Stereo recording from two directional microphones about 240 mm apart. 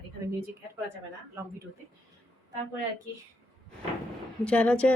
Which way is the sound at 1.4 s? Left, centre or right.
Centre.